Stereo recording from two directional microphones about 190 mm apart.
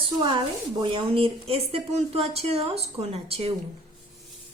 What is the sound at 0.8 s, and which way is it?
A woman's voice, 25° right (ahead or behind).